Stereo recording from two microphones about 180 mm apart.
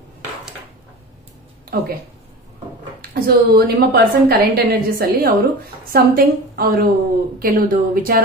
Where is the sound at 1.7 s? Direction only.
55° right (ahead or behind).